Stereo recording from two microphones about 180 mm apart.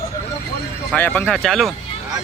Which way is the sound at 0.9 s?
10° left (ahead or behind).